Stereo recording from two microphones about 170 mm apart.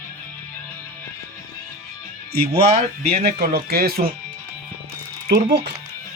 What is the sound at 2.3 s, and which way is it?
Speech, 70° right (ahead or behind).